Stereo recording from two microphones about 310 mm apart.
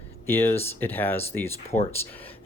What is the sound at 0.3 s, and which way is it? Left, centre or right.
Speech, centre.